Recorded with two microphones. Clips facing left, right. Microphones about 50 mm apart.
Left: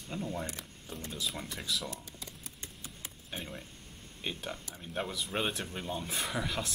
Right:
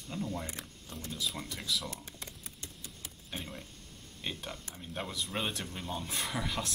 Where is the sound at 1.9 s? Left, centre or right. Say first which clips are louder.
Even; right.